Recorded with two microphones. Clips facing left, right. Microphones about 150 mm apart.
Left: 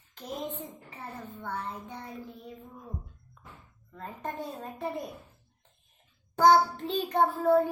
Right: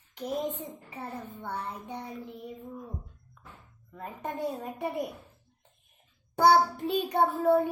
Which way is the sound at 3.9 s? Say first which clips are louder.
Right 1 dB; 15° right (ahead or behind).